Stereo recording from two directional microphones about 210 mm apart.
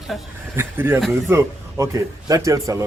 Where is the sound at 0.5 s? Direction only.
10° right (ahead or behind).